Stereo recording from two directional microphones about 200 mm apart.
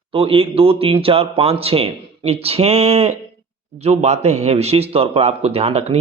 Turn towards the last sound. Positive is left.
turn(degrees=-30)  # may be behind; listen again after turning